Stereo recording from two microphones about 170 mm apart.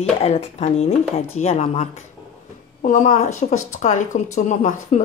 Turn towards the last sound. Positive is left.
turn(degrees=45)  # may be behind; listen again after turning